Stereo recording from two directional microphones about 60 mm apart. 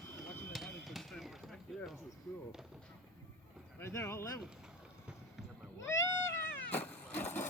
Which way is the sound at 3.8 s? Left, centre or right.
Left.